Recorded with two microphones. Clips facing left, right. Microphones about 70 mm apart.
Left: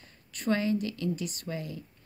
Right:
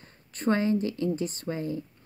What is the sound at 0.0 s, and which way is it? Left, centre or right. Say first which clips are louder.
A woman's voice: right 5 dB; right.